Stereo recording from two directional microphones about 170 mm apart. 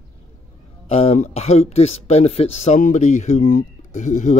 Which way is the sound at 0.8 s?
40° left (ahead or behind).